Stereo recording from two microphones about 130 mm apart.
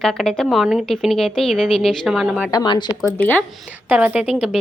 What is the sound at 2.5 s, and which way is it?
Speech, 35° left (ahead or behind).